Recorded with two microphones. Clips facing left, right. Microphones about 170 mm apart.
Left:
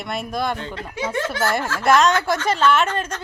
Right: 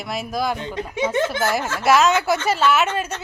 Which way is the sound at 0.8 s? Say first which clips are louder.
Right 4 dB; 20° right (ahead or behind).